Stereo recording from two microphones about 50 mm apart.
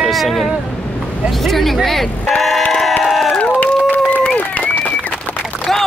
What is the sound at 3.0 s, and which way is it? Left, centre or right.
Crowd, centre.